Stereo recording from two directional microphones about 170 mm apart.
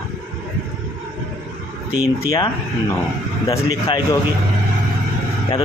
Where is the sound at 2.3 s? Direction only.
20° left (ahead or behind).